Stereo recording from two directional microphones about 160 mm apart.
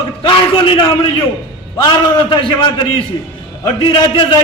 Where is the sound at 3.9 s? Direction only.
30° left (ahead or behind).